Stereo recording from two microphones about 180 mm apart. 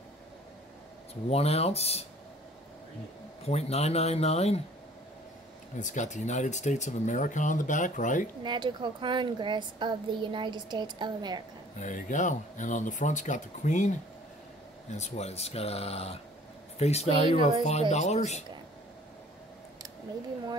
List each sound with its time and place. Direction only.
1.3 s speech: 35° left (ahead or behind)
3.4 s speech: 35° left (ahead or behind)
5.8 s speech: 45° left (ahead or behind)
8.5 s a child's voice: 25° right (ahead or behind)
11.8 s speech: 45° left (ahead or behind)
15.0 s speech: 35° left (ahead or behind)